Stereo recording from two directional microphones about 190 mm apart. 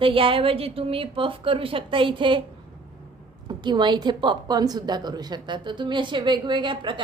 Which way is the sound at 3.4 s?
25° right (ahead or behind).